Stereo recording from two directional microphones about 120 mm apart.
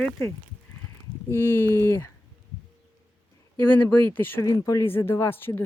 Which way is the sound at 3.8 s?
20° left (ahead or behind).